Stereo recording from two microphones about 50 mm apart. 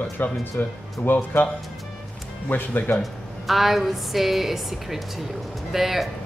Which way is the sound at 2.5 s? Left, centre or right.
Left.